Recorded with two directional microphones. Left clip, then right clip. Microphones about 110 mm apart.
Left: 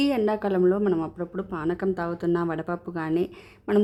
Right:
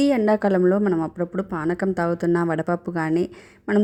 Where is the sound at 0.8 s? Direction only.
15° right (ahead or behind).